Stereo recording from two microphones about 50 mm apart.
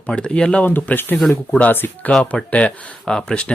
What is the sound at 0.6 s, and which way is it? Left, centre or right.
Speech, left.